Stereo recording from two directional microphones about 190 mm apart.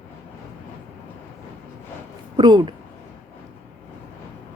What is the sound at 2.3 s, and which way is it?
Speech, 25° right (ahead or behind).